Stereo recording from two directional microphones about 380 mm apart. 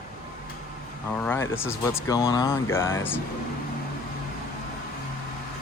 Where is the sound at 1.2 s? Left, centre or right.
Centre.